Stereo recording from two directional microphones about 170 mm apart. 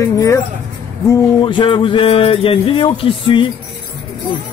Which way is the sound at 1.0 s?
25° left (ahead or behind).